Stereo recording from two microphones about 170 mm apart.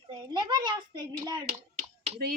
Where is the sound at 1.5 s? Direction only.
40° right (ahead or behind).